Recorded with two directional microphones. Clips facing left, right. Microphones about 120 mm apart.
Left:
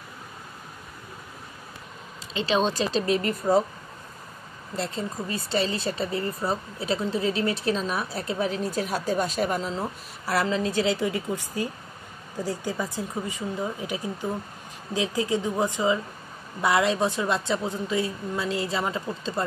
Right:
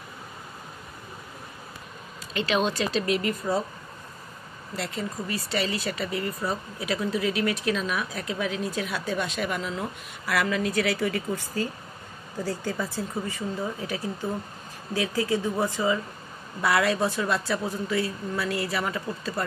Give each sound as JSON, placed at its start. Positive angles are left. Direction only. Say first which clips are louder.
{"t": 2.3, "sound": "speech", "louder": "left 1 dB", "side_deg": 30}
{"t": 4.7, "sound": "a woman's voice", "louder": "left 2 dB", "side_deg": 30}